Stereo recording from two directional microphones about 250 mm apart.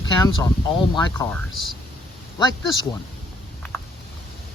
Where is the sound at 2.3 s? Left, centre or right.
Centre.